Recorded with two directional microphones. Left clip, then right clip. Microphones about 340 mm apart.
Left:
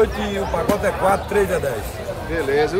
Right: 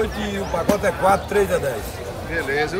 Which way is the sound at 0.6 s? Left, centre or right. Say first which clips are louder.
Right 1 dB; centre.